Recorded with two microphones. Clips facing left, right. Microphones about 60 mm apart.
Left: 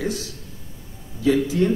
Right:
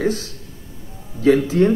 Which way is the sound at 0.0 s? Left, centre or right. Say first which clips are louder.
Right 6 dB; right.